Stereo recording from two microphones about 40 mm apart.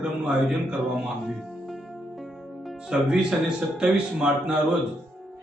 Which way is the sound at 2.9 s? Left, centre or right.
Right.